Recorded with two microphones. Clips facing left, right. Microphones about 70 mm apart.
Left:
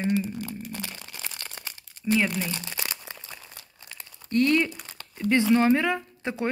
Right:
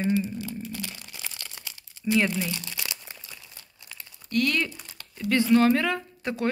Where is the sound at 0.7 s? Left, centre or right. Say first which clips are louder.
Even; left.